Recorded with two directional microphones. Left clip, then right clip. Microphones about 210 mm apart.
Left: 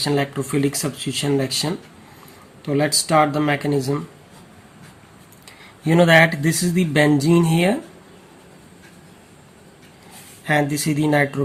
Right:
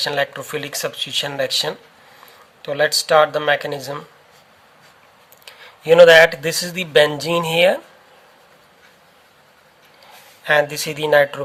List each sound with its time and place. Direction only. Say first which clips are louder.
0.0 s speech: right 1 dB; 35° right (ahead or behind)
5.5 s speech: right 8 dB; 35° right (ahead or behind)
10.4 s speech: right 3 dB; 35° right (ahead or behind)